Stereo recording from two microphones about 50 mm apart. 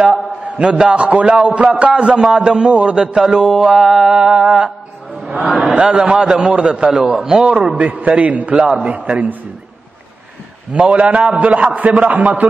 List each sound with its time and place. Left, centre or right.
0.0 s a man's voice: centre
3.3 s a man's voice: centre
5.2 s a sound: centre
5.8 s a man's voice: centre
7.7 s a man's voice: right
10.7 s a man's voice: right